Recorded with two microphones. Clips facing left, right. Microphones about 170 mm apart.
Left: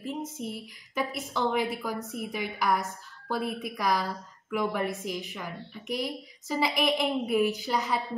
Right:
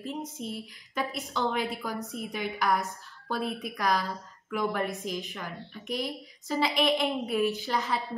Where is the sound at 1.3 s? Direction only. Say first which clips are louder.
Left 2 dB; centre (ahead or behind).